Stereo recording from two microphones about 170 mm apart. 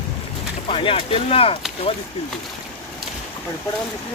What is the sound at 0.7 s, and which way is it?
Speech, 30° left (ahead or behind).